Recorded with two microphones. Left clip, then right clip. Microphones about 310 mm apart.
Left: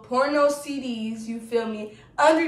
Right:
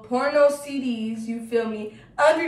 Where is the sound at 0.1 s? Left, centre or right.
Centre.